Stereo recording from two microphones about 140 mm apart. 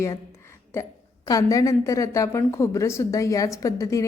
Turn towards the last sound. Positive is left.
turn(degrees=25)  # may be behind; listen again after turning